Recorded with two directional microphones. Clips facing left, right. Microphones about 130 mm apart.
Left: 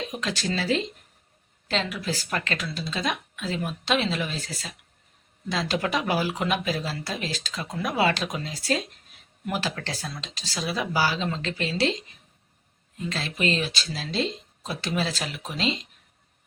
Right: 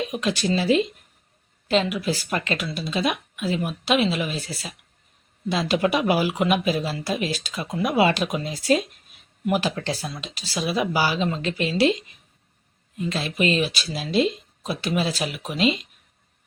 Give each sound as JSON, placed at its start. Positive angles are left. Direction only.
{"t": 0.0, "sound": "speech", "side_deg": -15}
{"t": 13.1, "sound": "speech", "side_deg": -15}